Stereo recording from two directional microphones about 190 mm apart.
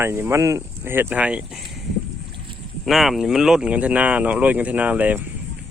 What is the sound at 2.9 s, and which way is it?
Speech, centre (ahead or behind).